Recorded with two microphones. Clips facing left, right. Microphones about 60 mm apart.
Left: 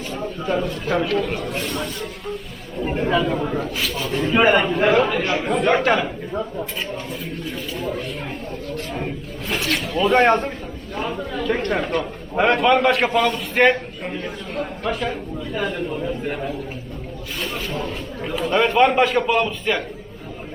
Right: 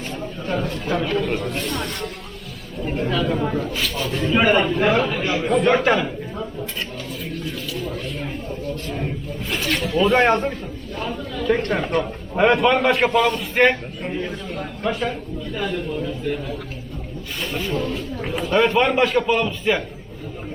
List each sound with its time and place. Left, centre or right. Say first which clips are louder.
1.0 s a man's voice: even; centre
2.8 s speech: left 3 dB; centre
3.2 s a man's voice: even; centre
7.4 s speech: left 3 dB; centre
9.5 s a man's voice: even; centre
16.2 s a man's voice: even; left
17.4 s a man's voice: right 3 dB; centre